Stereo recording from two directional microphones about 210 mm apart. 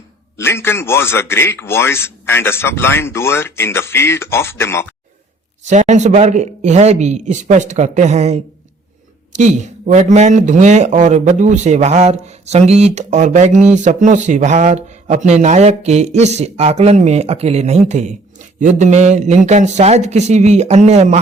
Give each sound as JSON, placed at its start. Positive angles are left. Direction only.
{"t": 0.3, "sound": "a man's voice", "side_deg": 10}
{"t": 5.6, "sound": "speech", "side_deg": -35}